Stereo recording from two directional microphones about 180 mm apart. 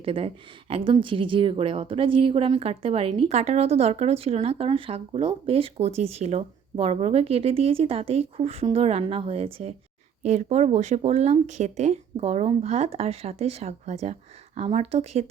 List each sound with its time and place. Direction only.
0.0 s a woman's voice: 30° right (ahead or behind)